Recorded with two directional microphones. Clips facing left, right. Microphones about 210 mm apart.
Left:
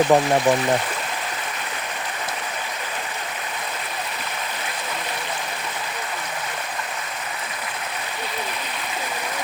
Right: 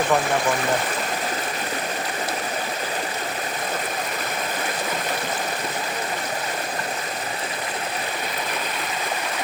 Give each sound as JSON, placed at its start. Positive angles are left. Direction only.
{"t": 0.1, "sound": "speech", "side_deg": 40}